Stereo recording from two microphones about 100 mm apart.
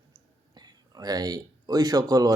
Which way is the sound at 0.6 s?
40° right (ahead or behind).